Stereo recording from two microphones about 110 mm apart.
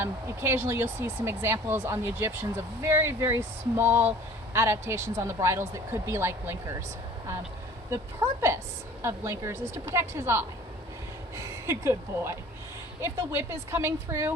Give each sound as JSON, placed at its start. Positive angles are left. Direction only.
{"t": 0.0, "sound": "speech", "side_deg": -20}
{"t": 7.9, "sound": "speech", "side_deg": -25}